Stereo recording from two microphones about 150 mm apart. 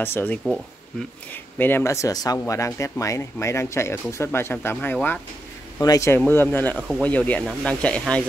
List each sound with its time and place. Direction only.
0.0 s speech: 15° left (ahead or behind)